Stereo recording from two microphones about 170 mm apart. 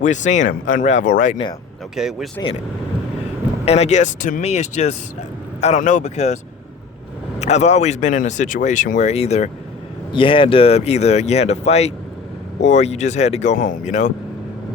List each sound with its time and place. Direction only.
0.0 s speech: 45° left (ahead or behind)
2.0 s speech: 5° right (ahead or behind)
3.7 s speech: 40° left (ahead or behind)